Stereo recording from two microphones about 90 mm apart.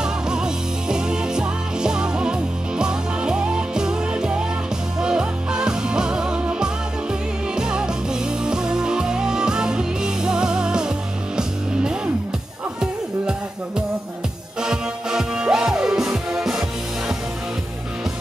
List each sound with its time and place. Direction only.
0.0 s music: 10° right (ahead or behind)
14.6 s music: 5° right (ahead or behind)